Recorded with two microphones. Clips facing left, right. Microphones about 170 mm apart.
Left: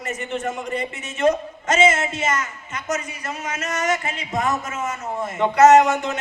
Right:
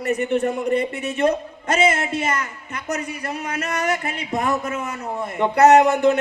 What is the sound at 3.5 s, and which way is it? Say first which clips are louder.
A man's voice: even; 60° right (ahead or behind).